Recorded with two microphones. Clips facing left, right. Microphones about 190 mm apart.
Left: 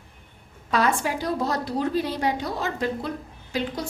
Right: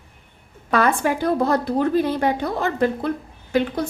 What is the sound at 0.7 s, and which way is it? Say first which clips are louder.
A woman's voice: right 4 dB; 55° right (ahead or behind).